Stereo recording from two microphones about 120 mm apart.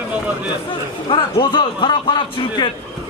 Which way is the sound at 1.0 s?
40° left (ahead or behind).